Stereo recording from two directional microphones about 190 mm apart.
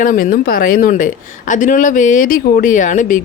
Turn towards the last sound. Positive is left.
turn(degrees=45)  # may be behind; listen again after turning